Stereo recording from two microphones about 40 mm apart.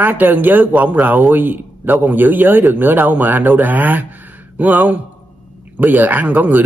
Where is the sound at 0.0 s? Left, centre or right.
Right.